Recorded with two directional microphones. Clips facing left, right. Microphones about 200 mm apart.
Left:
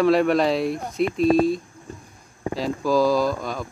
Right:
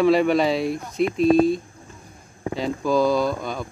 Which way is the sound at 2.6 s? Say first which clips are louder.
Even; centre (ahead or behind).